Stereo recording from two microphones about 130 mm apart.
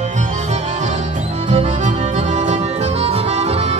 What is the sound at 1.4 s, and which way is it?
Music, 60° right (ahead or behind).